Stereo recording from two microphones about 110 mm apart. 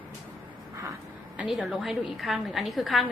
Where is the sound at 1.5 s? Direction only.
10° right (ahead or behind).